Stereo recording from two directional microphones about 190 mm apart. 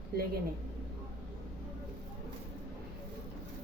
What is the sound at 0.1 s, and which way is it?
Speech, 55° right (ahead or behind).